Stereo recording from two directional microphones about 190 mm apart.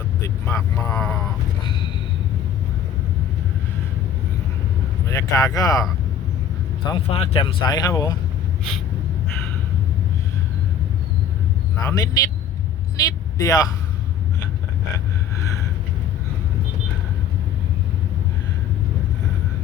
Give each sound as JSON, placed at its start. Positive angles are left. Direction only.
{"t": 0.4, "sound": "speech", "side_deg": 15}
{"t": 5.0, "sound": "speech", "side_deg": 15}
{"t": 6.8, "sound": "speech", "side_deg": 30}
{"t": 11.8, "sound": "speech", "side_deg": 20}